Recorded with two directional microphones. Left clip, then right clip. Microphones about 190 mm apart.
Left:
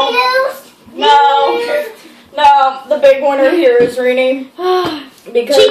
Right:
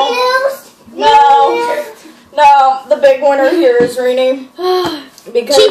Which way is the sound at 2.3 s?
5° right (ahead or behind).